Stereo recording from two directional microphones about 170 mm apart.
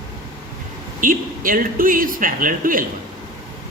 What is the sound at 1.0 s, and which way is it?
Speech, 55° right (ahead or behind).